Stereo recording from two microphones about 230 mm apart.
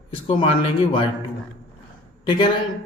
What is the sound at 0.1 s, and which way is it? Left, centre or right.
Speech, left.